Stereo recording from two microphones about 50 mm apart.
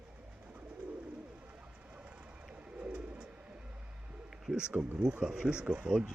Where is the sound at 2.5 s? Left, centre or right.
Right.